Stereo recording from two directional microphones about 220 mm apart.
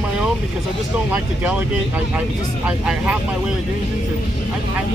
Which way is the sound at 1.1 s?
5° right (ahead or behind).